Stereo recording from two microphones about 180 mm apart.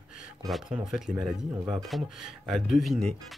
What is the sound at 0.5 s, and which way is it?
Speech, centre (ahead or behind).